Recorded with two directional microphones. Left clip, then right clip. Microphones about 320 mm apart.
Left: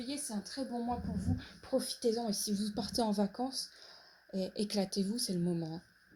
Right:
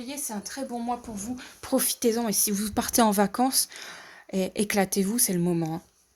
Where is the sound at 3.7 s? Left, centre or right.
Right.